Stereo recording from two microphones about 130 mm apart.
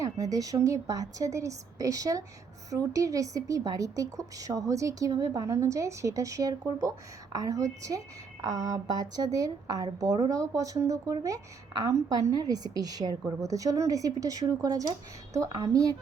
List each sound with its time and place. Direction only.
0.0 s speech: 25° right (ahead or behind)